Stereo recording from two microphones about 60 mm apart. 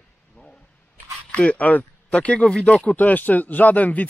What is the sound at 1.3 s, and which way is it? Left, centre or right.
Speech, left.